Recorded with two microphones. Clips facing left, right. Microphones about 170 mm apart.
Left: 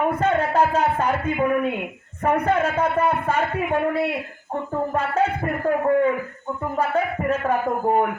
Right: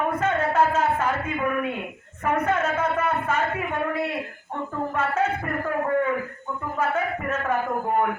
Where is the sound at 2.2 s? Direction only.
35° left (ahead or behind).